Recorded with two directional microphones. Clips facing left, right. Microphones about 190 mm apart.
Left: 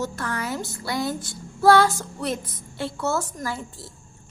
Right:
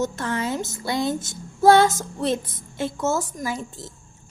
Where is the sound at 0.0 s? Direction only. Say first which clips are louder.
Right 4 dB; 25° right (ahead or behind).